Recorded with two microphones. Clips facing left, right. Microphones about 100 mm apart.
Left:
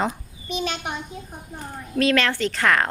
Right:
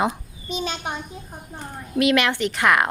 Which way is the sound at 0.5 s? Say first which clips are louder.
Even; 30° right (ahead or behind).